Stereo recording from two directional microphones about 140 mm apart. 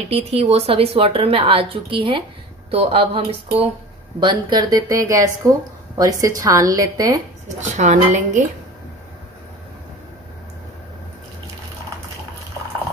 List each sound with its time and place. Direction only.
0.1 s a woman's voice: 45° right (ahead or behind)
4.2 s speech: 30° right (ahead or behind)
7.4 s speech: 60° right (ahead or behind)